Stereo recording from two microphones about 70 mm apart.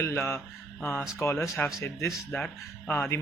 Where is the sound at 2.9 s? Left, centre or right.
Left.